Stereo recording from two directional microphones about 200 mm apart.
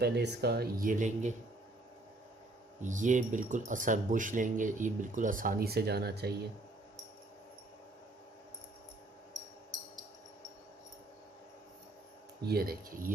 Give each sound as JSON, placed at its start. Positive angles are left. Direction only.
{"t": 0.0, "sound": "speech", "side_deg": -55}
{"t": 2.8, "sound": "speech", "side_deg": -40}
{"t": 12.5, "sound": "speech", "side_deg": -50}